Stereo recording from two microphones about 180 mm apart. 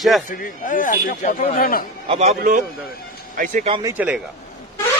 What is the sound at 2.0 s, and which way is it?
A man's voice, 40° right (ahead or behind).